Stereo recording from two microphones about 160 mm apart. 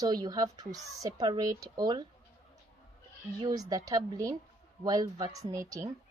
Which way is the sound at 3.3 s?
25° right (ahead or behind).